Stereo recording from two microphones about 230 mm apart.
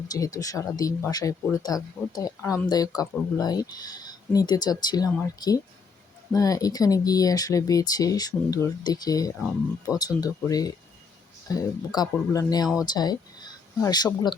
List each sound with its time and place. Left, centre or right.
0.1 s speech: centre